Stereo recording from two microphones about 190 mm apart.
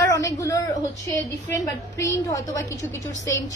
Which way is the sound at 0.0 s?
15° left (ahead or behind).